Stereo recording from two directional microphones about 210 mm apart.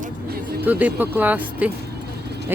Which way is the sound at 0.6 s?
10° right (ahead or behind).